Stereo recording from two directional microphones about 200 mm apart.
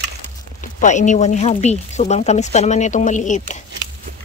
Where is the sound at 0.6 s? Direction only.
40° left (ahead or behind).